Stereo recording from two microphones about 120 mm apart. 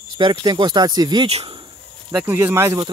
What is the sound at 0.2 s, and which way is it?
Speech, 40° right (ahead or behind).